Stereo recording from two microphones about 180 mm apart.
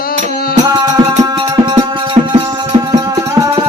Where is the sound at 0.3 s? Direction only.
55° left (ahead or behind).